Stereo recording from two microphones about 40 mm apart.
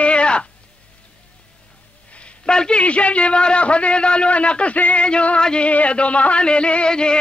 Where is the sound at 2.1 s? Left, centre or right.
Left.